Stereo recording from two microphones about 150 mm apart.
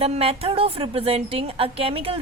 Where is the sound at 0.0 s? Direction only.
40° right (ahead or behind).